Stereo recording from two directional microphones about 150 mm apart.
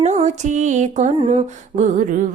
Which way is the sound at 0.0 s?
50° right (ahead or behind).